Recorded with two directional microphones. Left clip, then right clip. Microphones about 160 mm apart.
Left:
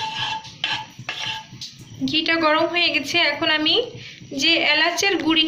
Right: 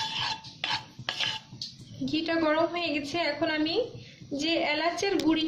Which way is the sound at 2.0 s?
40° right (ahead or behind).